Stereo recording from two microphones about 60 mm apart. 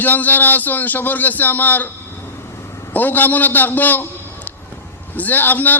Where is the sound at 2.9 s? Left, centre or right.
Left.